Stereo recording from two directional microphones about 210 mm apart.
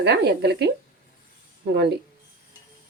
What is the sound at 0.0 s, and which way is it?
Speech, 55° right (ahead or behind).